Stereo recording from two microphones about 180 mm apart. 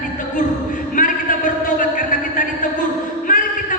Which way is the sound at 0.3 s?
45° left (ahead or behind).